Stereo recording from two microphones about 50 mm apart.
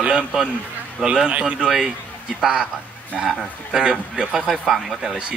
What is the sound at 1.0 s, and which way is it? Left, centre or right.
Speech, centre.